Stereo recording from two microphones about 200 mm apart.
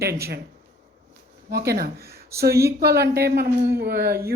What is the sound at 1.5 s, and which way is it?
Speech, 50° right (ahead or behind).